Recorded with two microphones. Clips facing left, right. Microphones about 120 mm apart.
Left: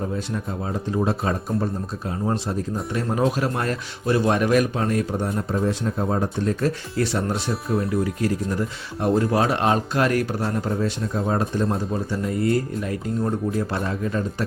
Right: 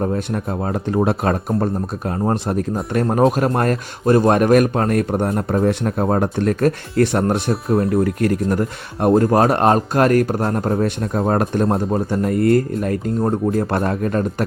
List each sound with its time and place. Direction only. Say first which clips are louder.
0.0 s speech: right 6 dB; 60° right (ahead or behind)